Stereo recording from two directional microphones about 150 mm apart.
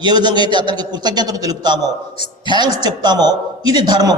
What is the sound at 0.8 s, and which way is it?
Speech, 30° right (ahead or behind).